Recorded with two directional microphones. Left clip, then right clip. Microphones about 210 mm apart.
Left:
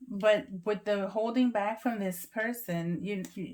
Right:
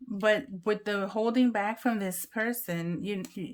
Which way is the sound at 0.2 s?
30° right (ahead or behind).